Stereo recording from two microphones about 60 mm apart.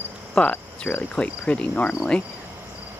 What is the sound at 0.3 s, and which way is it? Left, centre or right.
Cricket, left.